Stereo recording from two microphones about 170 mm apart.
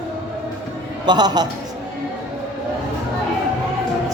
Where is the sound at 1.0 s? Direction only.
25° right (ahead or behind).